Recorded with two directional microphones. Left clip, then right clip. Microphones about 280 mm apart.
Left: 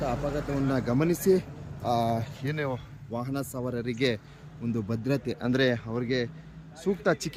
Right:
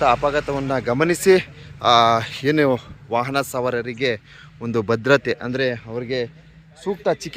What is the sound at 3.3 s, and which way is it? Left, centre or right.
Speech, centre.